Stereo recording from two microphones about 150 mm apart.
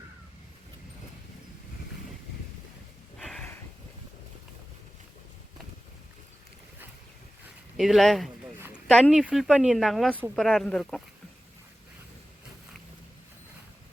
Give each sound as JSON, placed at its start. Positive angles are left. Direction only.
{"t": 3.2, "sound": "sniff", "side_deg": 5}
{"t": 7.8, "sound": "speech", "side_deg": 0}
{"t": 8.5, "sound": "a sound", "side_deg": -15}
{"t": 8.9, "sound": "speech", "side_deg": 5}